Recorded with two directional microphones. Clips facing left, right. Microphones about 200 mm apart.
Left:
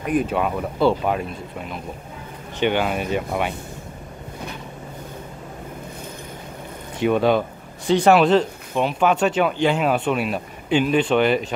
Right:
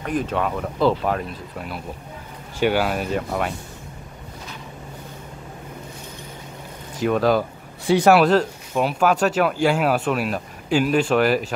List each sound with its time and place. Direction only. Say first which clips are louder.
0.0 s speech: left 2 dB; 10° left (ahead or behind)
2.6 s speech: right 1 dB; 5° right (ahead or behind)
7.0 s speech: left 1 dB; centre (ahead or behind)